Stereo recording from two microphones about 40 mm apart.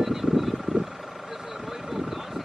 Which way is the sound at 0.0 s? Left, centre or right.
Centre.